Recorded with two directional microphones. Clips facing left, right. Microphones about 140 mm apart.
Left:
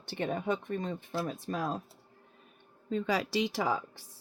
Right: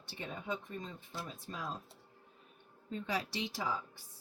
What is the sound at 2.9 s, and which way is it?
Speech, 90° left.